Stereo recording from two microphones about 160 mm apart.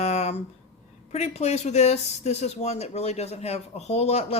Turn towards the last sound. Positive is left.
turn(degrees=40)  # may be behind; listen again after turning